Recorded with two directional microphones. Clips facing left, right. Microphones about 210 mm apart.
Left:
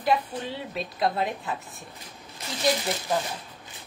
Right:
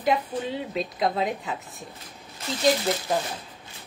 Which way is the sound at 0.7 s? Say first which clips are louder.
Even; 20° right (ahead or behind).